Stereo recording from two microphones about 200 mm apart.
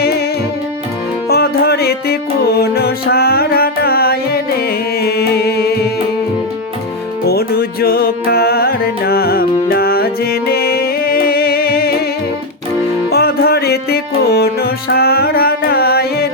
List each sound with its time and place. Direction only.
1.3 s music: 50° left (ahead or behind)
7.3 s music: 50° left (ahead or behind)
13.1 s music: 50° left (ahead or behind)